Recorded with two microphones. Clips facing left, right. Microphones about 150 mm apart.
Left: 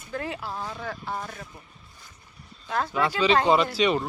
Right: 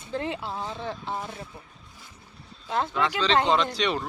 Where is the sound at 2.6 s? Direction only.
20° right (ahead or behind).